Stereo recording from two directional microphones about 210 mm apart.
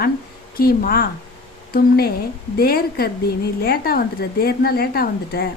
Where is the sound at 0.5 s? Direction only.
45° left (ahead or behind).